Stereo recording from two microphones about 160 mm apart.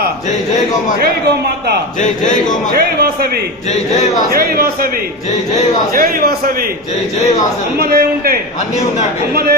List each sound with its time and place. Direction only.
2.0 s speech: 55° left (ahead or behind)
2.7 s a man's voice: 70° right (ahead or behind)
5.9 s a man's voice: 65° right (ahead or behind)
7.8 s a man's voice: 70° right (ahead or behind)